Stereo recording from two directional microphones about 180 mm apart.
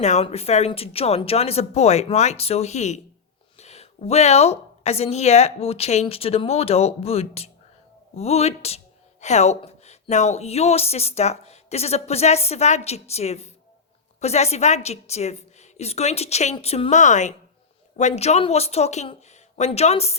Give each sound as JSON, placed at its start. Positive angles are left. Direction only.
{"t": 0.0, "sound": "speech", "side_deg": 40}